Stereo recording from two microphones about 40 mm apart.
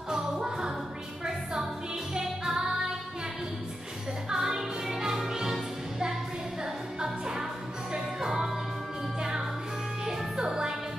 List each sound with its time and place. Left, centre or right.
0.1 s music: centre
2.1 s music: centre
4.3 s music: centre
10.0 s music: centre